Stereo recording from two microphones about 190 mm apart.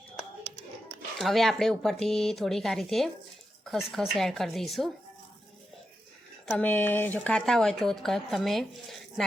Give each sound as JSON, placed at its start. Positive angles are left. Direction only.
{"t": 1.2, "sound": "speech", "side_deg": 0}
{"t": 6.4, "sound": "speech", "side_deg": 5}